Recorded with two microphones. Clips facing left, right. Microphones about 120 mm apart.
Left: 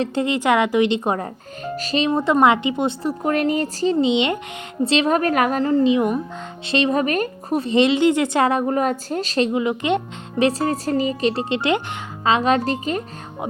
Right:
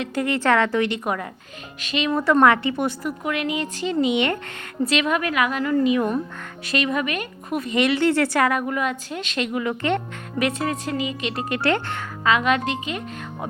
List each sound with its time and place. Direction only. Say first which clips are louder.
0.0 s speech: left 2 dB; 25° left (ahead or behind)
3.9 s a woman's voice: even; 20° left (ahead or behind); by 5.7 s 40° left (ahead or behind)
5.7 s a woman's voice: left 1 dB; 25° left (ahead or behind)
9.5 s speech: left 3 dB; 20° left (ahead or behind)
10.3 s a woman's voice: left 5 dB; 30° left (ahead or behind)
11.4 s speech: left 2 dB; 20° left (ahead or behind)
12.2 s a woman's voice: left 3 dB; 30° left (ahead or behind)